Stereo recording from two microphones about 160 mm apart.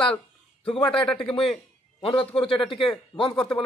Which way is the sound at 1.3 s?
35° left (ahead or behind).